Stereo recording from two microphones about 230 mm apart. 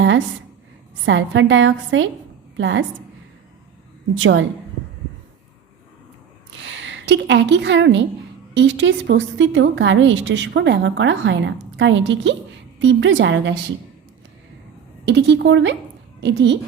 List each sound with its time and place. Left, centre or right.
1.0 s a woman's voice: right
4.2 s a woman's voice: right
6.6 s a woman's voice: right
15.0 s a woman's voice: right